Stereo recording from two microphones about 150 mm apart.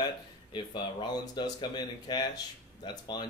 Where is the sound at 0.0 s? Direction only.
30° left (ahead or behind).